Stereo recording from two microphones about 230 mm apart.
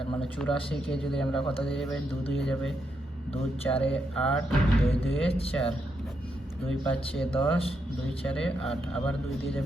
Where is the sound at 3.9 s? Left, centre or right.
Centre.